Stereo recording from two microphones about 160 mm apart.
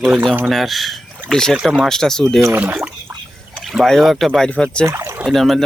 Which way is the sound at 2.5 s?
10° right (ahead or behind).